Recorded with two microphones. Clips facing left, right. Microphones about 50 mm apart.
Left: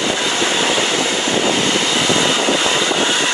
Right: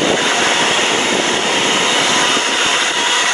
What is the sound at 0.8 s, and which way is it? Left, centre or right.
Vehicle, right.